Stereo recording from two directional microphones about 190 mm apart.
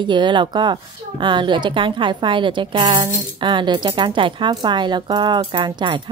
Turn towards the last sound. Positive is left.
turn(degrees=-25)  # may be behind; listen again after turning